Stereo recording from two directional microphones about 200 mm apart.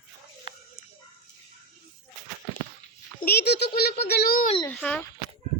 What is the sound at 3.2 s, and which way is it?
A child's voice, 55° left (ahead or behind).